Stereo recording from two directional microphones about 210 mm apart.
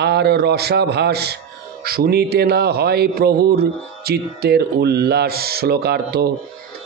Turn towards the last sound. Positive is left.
turn(degrees=-50)  # may be behind; listen again after turning